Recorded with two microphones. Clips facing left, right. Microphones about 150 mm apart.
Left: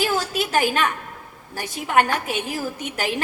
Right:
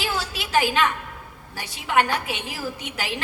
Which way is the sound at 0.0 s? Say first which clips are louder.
Left 6 dB; 45° left (ahead or behind).